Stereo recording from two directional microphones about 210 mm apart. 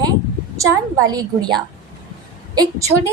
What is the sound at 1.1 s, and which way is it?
Speech, 20° right (ahead or behind).